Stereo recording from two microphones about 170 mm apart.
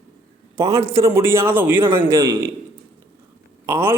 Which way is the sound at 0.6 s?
20° right (ahead or behind).